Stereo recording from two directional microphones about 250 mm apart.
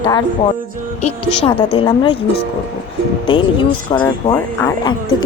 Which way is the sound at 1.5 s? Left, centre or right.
Left.